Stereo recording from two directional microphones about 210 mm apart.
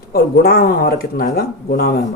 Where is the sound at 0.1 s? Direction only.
45° left (ahead or behind).